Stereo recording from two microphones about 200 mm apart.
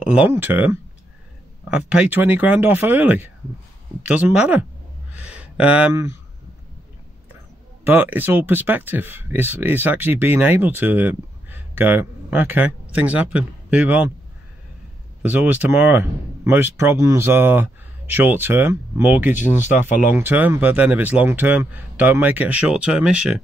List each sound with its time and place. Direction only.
0.0 s speech: 5° right (ahead or behind)
5.1 s a sound: 5° right (ahead or behind)
7.8 s speech: 10° right (ahead or behind)
15.2 s speech: 10° right (ahead or behind)
19.6 s speech: 35° left (ahead or behind)
20.2 s speech: 10° right (ahead or behind)